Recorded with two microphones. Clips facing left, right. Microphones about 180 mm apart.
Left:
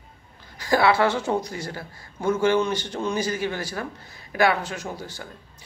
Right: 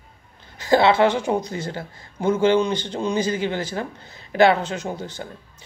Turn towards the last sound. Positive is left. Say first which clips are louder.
# right 4 dB
turn(degrees=-20)  # may be behind; listen again after turning